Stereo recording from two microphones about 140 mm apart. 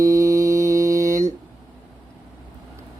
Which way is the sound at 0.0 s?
25° right (ahead or behind).